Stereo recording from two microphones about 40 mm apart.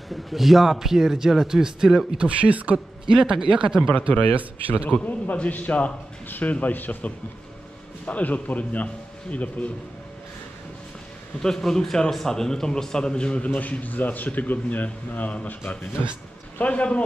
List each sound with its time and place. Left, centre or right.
0.1 s a man's voice: centre
2.1 s speech: right
3.1 s a man's voice: centre
4.4 s speech: right
4.8 s a man's voice: left
6.7 s a man's voice: left
8.1 s a man's voice: left
11.4 s a man's voice: centre
13.6 s a man's voice: left
16.5 s a man's voice: left